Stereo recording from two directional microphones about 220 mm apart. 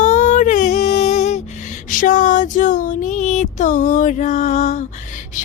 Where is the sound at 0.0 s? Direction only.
35° left (ahead or behind).